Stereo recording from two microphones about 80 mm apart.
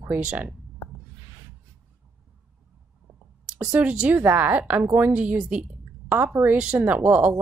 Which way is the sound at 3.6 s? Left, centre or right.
Centre.